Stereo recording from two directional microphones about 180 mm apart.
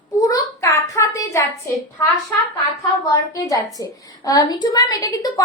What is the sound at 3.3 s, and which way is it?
A woman's voice, 20° left (ahead or behind).